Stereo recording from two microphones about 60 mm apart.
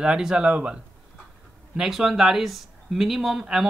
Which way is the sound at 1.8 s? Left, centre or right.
Centre.